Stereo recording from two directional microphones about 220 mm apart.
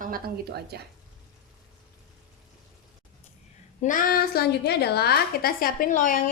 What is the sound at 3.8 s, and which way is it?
A woman's voice, 35° left (ahead or behind).